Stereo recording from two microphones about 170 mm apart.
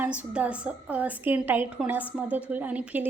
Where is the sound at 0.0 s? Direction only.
10° right (ahead or behind).